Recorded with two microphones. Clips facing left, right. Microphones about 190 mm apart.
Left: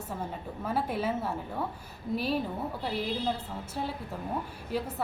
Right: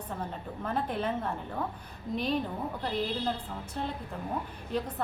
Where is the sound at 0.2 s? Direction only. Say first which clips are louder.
Even; 5° left (ahead or behind).